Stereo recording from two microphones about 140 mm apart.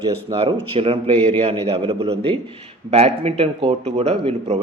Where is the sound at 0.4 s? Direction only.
40° right (ahead or behind).